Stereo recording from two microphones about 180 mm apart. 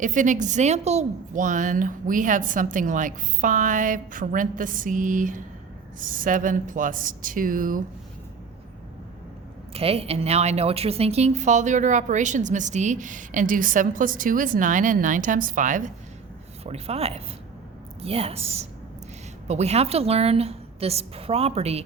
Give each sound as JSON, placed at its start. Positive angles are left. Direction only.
{"t": 0.0, "sound": "a woman's voice", "side_deg": -45}
{"t": 9.7, "sound": "a woman's voice", "side_deg": -35}
{"t": 16.6, "sound": "a woman's voice", "side_deg": -35}